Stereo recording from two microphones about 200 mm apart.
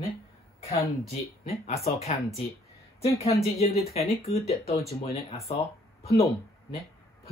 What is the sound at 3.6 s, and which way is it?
Speech, 30° left (ahead or behind).